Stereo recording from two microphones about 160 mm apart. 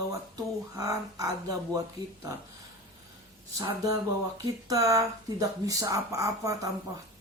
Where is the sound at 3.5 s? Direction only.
20° right (ahead or behind).